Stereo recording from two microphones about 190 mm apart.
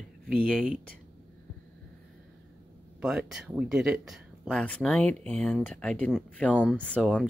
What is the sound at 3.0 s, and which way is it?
Speech, 5° right (ahead or behind).